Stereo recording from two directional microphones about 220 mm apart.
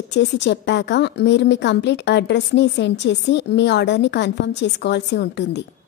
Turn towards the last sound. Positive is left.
turn(degrees=50)  # may be behind; listen again after turning